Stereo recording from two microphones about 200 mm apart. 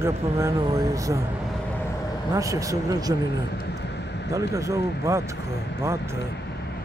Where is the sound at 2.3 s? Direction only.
15° right (ahead or behind).